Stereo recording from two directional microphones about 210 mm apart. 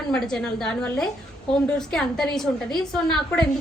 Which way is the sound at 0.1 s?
Centre (ahead or behind).